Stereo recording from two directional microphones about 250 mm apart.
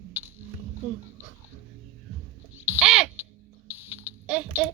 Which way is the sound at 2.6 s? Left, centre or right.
Centre.